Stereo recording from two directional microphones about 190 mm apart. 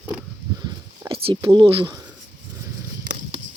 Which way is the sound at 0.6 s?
20° right (ahead or behind).